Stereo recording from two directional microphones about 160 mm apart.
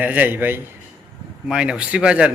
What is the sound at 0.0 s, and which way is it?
Speech, 10° right (ahead or behind).